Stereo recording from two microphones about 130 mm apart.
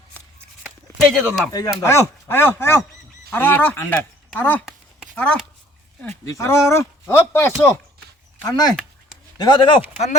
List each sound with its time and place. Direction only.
0.1 s a sound: 10° left (ahead or behind)
0.9 s speech: 5° left (ahead or behind)
1.5 s speech: 30° left (ahead or behind); by 5.4 s 10° left (ahead or behind)
6.2 s speech: 25° left (ahead or behind)
8.4 s speech: 30° left (ahead or behind)